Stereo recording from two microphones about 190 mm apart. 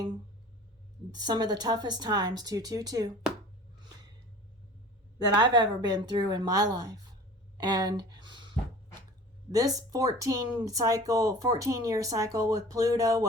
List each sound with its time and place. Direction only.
1.1 s speech: 20° right (ahead or behind)
5.4 s speech: 20° right (ahead or behind)
9.5 s speech: 20° right (ahead or behind)